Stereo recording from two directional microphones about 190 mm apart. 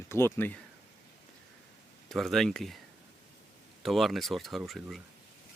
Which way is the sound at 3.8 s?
Centre (ahead or behind).